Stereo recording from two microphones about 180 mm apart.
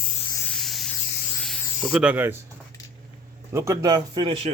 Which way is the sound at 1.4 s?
5° right (ahead or behind).